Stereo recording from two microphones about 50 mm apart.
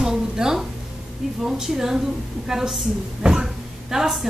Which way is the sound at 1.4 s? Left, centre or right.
Centre.